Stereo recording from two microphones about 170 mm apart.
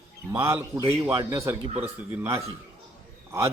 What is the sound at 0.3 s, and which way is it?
A man's voice, 15° right (ahead or behind).